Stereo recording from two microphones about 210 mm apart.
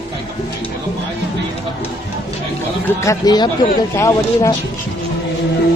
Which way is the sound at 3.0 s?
15° left (ahead or behind).